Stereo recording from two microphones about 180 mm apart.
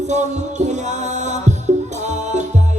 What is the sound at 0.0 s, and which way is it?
Music, 40° right (ahead or behind).